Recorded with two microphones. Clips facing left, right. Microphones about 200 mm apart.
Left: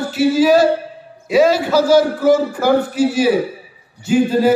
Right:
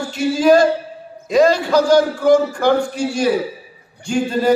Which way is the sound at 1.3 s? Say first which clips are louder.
Even; 5° left (ahead or behind).